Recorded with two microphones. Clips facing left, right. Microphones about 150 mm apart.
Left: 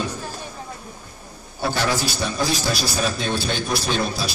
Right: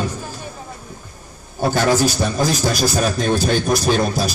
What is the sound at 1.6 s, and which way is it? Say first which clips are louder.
Speech: right 7 dB; 45° right (ahead or behind).